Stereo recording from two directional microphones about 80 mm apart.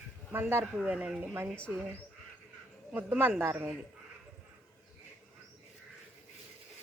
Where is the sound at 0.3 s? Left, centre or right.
Right.